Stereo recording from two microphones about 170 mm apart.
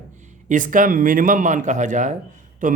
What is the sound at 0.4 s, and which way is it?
A man's voice, 50° right (ahead or behind).